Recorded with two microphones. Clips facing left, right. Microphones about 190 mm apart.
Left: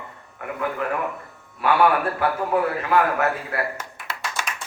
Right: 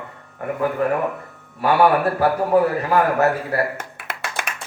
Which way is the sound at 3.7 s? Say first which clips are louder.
Right 2 dB; 60° right (ahead or behind).